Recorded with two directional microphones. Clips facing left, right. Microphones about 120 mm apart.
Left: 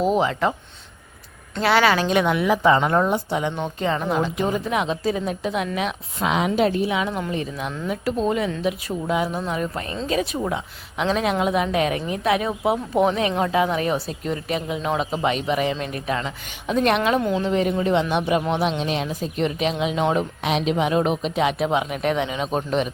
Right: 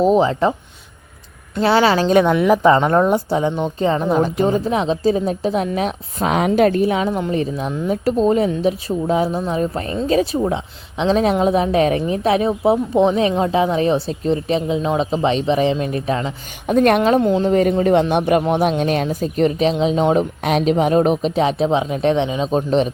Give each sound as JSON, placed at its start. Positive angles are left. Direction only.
{"t": 0.0, "sound": "a woman's voice", "side_deg": -30}
{"t": 1.6, "sound": "a woman's voice", "side_deg": -30}
{"t": 16.6, "sound": "speech", "side_deg": -50}
{"t": 17.2, "sound": "speech", "side_deg": -25}
{"t": 17.4, "sound": "a woman's voice", "side_deg": -45}
{"t": 20.1, "sound": "a woman's voice", "side_deg": -45}